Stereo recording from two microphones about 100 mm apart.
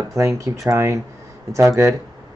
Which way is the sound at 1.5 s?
30° right (ahead or behind).